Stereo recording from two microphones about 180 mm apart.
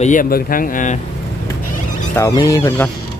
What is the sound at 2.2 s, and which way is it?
Speech, 20° left (ahead or behind).